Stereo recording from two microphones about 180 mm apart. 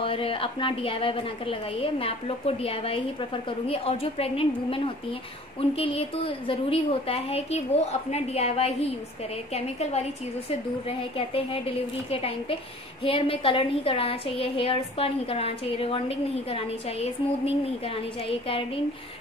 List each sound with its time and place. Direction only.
0.0 s a woman's voice: 30° left (ahead or behind)